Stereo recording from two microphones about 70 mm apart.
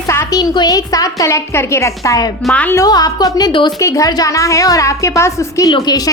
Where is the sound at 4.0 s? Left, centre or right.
Left.